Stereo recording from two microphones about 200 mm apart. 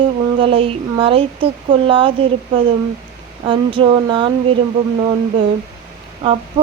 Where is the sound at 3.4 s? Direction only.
25° right (ahead or behind).